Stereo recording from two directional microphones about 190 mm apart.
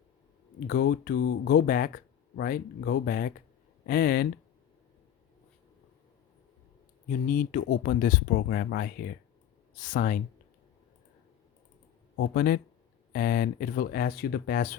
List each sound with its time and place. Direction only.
0.7 s speech: 55° left (ahead or behind)
7.1 s speech: 50° left (ahead or behind)
12.1 s speech: 70° left (ahead or behind); by 14.8 s 50° left (ahead or behind)